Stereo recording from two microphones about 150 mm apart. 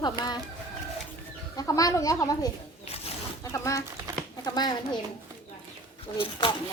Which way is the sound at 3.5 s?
20° left (ahead or behind).